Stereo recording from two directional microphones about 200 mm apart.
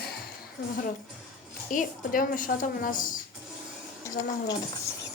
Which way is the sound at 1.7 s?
40° left (ahead or behind).